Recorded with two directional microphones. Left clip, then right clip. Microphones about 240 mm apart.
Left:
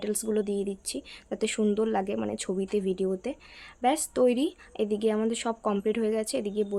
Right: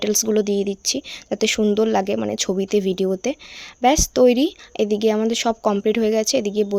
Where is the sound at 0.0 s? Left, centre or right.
Right.